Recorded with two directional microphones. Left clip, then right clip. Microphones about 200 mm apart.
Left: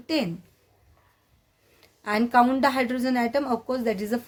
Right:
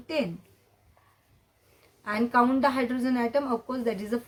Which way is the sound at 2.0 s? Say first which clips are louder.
Left 4 dB; 35° left (ahead or behind).